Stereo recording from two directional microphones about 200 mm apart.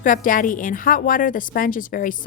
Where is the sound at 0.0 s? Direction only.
40° left (ahead or behind).